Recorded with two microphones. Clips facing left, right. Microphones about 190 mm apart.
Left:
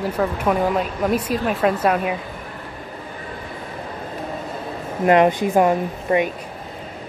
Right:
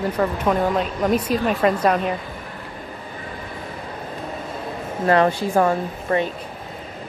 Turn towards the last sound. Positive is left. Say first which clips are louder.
# left 2 dB
turn(degrees=15)  # may be behind; listen again after turning